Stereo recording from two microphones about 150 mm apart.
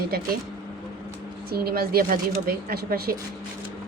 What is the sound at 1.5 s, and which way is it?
Speech, 90° right.